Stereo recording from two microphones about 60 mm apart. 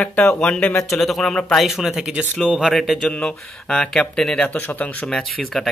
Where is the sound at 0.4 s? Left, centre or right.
Centre.